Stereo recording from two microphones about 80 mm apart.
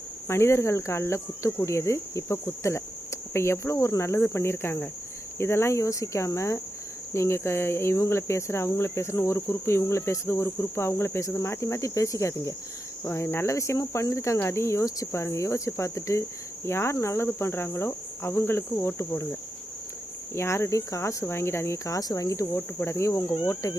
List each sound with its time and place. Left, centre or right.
0.3 s cricket: left
20.3 s cricket: left